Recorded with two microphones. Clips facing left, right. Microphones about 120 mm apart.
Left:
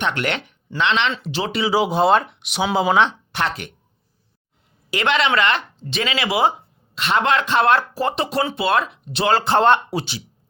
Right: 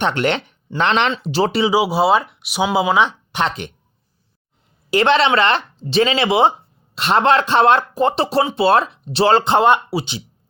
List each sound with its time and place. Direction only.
0.0 s speech: 30° right (ahead or behind)
0.8 s a man's voice: 45° right (ahead or behind)
1.7 s speech: 5° right (ahead or behind)
3.3 s speech: 20° right (ahead or behind)
4.9 s a woman's voice: 30° right (ahead or behind)
8.1 s a man's voice: 30° right (ahead or behind); by 10.1 s 10° right (ahead or behind)